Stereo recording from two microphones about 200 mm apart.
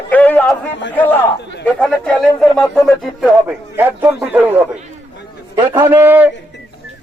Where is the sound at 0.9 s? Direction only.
10° left (ahead or behind).